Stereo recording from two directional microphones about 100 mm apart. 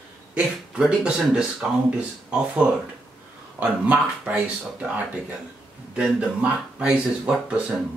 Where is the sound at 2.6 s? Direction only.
15° right (ahead or behind).